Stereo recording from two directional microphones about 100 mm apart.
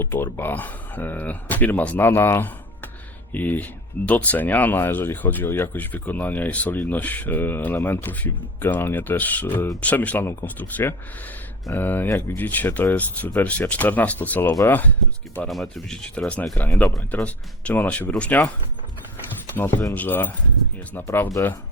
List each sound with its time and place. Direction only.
0.0 s speech: 20° left (ahead or behind)
15.4 s speech: 5° left (ahead or behind)
19.5 s speech: 20° left (ahead or behind)